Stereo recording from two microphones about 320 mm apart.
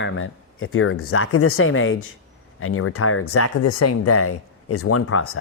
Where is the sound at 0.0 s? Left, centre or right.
Left.